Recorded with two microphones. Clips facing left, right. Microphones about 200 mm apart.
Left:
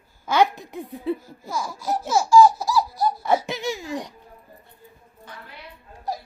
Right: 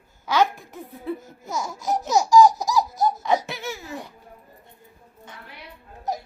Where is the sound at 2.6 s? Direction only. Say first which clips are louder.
Even; 20° right (ahead or behind).